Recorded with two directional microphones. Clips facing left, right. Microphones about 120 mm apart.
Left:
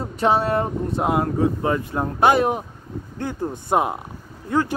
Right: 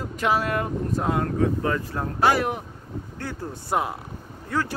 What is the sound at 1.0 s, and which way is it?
Speech, 20° left (ahead or behind).